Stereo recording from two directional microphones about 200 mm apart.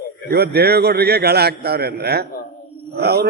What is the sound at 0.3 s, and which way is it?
A man's voice, 50° right (ahead or behind).